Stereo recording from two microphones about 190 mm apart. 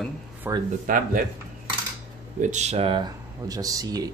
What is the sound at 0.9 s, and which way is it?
Speech, 45° right (ahead or behind).